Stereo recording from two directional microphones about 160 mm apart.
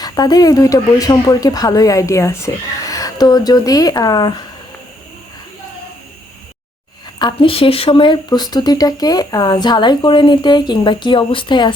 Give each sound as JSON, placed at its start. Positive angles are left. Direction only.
{"t": 0.0, "sound": "speech", "side_deg": 25}
{"t": 7.2, "sound": "speech", "side_deg": 30}